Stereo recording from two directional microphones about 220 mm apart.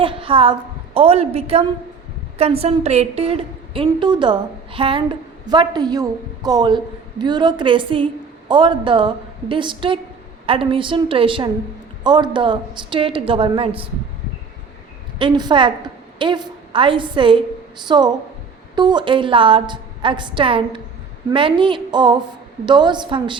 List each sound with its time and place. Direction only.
0.0 s a woman's voice: 25° right (ahead or behind)
15.2 s a woman's voice: 20° right (ahead or behind)